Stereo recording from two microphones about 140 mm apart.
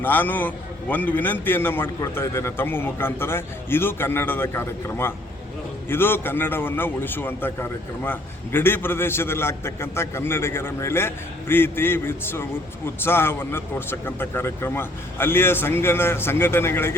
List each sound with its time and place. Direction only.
0.0 s a man's voice: 15° left (ahead or behind)